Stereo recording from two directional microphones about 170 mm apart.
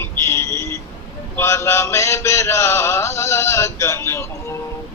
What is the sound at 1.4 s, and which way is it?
Mantra, 15° left (ahead or behind).